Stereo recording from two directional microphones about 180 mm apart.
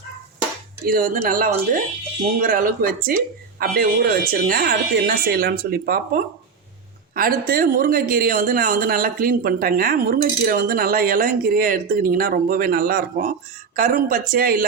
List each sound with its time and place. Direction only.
0.9 s a woman's voice: 50° right (ahead or behind)